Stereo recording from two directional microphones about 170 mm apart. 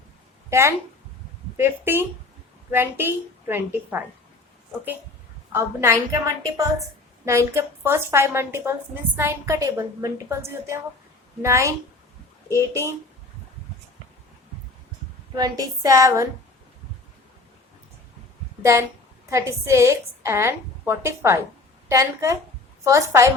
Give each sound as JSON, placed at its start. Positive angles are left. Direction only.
{"t": 1.5, "sound": "a woman's voice", "side_deg": -15}
{"t": 5.5, "sound": "a woman's voice", "side_deg": -15}
{"t": 15.4, "sound": "speech", "side_deg": -20}
{"t": 18.6, "sound": "a woman's voice", "side_deg": -15}